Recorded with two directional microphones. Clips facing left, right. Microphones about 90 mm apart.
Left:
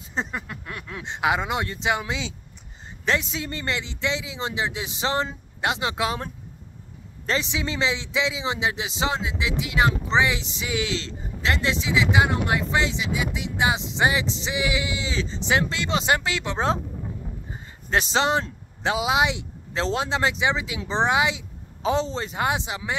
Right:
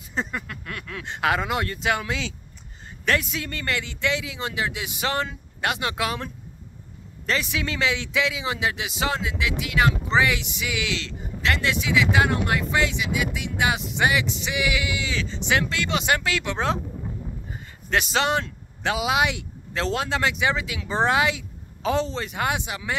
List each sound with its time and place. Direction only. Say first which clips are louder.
0.1 s a man's voice: even; 25° left (ahead or behind)
17.8 s speech: left 1 dB; 30° left (ahead or behind)